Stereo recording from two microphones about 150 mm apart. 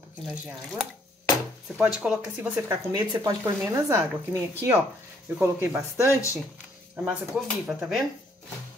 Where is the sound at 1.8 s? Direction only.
5° right (ahead or behind).